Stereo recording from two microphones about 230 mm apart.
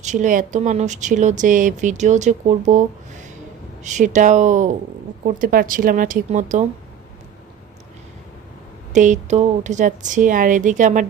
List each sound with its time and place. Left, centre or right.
0.0 s speech: right
8.9 s speech: right